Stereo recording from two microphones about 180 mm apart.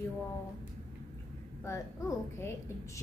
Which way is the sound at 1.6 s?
15° left (ahead or behind).